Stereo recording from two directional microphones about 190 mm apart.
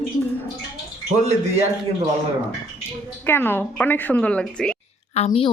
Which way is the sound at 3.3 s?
10° left (ahead or behind).